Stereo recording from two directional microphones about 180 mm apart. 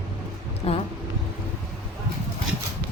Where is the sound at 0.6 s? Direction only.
30° left (ahead or behind).